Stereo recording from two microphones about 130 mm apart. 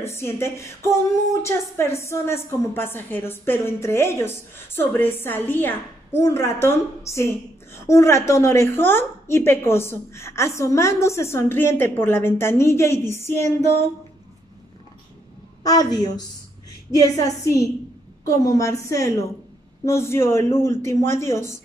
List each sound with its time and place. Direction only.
0.0 s a woman's voice: 20° left (ahead or behind)
13.6 s female singing: 60° right (ahead or behind)
15.6 s a woman's voice: 30° left (ahead or behind)